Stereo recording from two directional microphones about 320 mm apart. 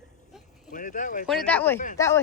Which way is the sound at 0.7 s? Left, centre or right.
Left.